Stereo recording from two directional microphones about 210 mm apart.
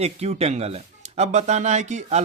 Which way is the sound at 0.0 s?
30° right (ahead or behind).